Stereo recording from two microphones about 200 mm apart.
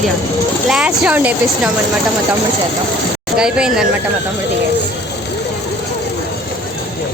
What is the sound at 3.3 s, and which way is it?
Speech, 5° right (ahead or behind).